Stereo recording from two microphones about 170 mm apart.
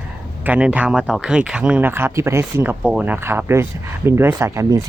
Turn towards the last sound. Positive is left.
turn(degrees=-20)  # may be behind; listen again after turning